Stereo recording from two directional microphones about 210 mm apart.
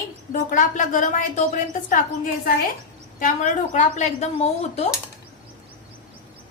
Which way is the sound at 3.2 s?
35° left (ahead or behind).